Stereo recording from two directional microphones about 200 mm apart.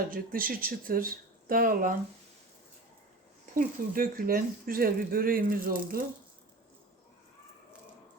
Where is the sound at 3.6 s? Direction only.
45° right (ahead or behind).